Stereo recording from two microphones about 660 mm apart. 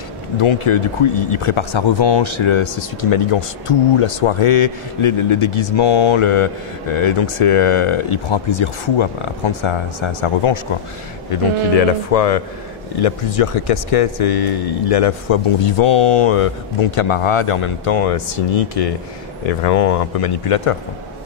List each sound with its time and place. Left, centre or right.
0.4 s speech: left
11.7 s speech: left
19.4 s speech: left